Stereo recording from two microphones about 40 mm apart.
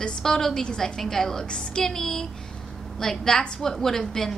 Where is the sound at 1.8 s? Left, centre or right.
Centre.